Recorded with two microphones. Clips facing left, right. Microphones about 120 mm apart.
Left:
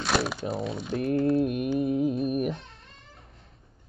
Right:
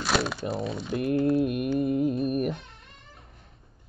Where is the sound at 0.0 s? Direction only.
Centre (ahead or behind).